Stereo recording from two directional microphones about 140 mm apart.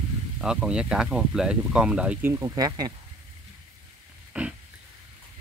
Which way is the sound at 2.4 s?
25° right (ahead or behind).